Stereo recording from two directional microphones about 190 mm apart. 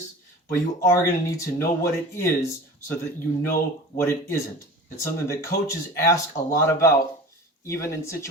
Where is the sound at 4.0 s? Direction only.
15° left (ahead or behind).